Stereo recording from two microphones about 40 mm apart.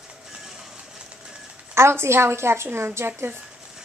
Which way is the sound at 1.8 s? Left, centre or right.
Right.